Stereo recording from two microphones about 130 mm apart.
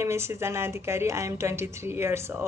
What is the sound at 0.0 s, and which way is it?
A woman's voice, 20° right (ahead or behind).